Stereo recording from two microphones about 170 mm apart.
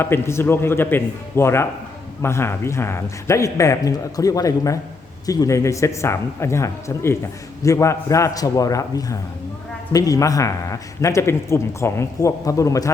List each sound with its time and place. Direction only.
0.0 s a man's voice: 15° left (ahead or behind)